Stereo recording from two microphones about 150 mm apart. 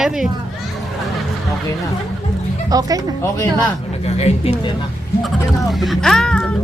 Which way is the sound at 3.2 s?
25° left (ahead or behind).